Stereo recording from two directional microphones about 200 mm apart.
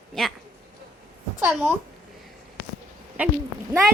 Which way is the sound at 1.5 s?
5° right (ahead or behind).